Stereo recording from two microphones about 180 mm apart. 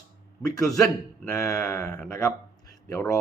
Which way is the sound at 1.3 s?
15° left (ahead or behind).